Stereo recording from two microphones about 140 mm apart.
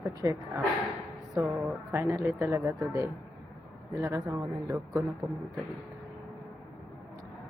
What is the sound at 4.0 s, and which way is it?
Speech, 25° right (ahead or behind).